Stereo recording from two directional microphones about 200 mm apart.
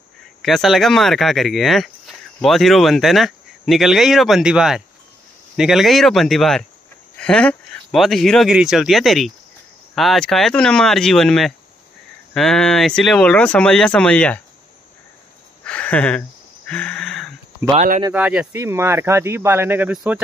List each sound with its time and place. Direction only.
0.4 s speech: centre (ahead or behind)
15.6 s a sound: 5° left (ahead or behind)
17.7 s speech: 40° right (ahead or behind)
18.1 s speech: 5° right (ahead or behind)